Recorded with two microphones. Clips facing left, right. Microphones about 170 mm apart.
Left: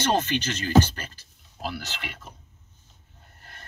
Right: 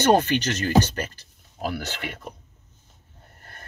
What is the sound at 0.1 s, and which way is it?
Speech, 55° right (ahead or behind).